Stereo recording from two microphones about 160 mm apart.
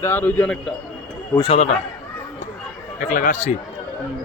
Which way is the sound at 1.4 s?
40° left (ahead or behind).